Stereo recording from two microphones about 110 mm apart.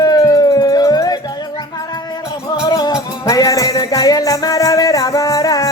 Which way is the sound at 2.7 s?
35° left (ahead or behind).